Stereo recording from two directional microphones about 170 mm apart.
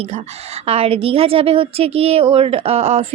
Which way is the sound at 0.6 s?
35° right (ahead or behind).